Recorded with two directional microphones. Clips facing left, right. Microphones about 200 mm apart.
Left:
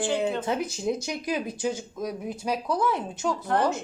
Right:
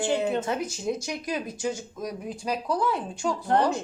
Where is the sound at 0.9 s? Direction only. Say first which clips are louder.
Left 2 dB; 10° left (ahead or behind).